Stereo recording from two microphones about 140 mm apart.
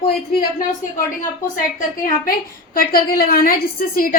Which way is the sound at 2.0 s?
90° left.